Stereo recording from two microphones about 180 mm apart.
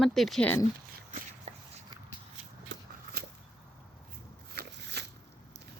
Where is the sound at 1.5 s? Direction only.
40° right (ahead or behind).